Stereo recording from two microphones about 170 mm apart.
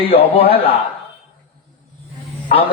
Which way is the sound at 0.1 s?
35° left (ahead or behind).